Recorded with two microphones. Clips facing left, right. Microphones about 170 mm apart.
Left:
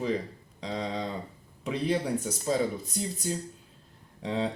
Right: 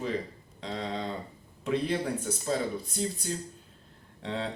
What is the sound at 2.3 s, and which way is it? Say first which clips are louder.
Speech: right 2 dB; 15° left (ahead or behind).